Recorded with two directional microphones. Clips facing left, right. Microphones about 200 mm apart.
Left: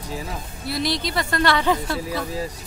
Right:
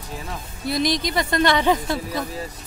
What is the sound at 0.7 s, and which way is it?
A woman's voice, 15° right (ahead or behind).